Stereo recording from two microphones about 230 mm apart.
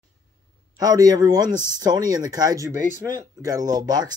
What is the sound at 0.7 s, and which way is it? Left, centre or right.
Speech, centre.